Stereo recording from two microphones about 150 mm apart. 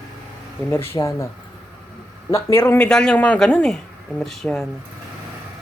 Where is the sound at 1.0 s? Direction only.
20° left (ahead or behind).